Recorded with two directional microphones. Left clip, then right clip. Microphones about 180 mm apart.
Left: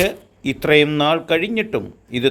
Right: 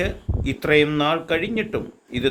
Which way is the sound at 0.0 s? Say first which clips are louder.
Left 6 dB; 30° left (ahead or behind).